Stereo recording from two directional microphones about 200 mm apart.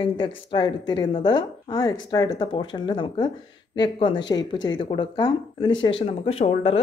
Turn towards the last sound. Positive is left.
turn(degrees=30)  # may be behind; listen again after turning